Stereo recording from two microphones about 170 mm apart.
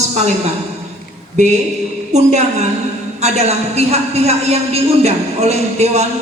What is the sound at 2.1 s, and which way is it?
A man's voice, 40° right (ahead or behind).